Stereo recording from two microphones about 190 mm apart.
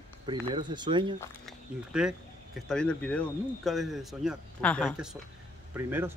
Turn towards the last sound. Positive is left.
turn(degrees=-15)  # may be behind; listen again after turning